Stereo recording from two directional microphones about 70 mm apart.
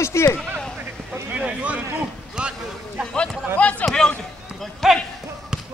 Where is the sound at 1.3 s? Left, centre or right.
Centre.